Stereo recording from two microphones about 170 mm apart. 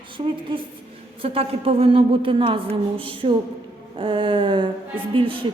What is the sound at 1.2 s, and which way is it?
A woman's voice, 35° right (ahead or behind).